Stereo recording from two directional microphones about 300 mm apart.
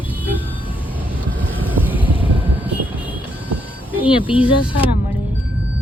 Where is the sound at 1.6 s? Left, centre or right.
Centre.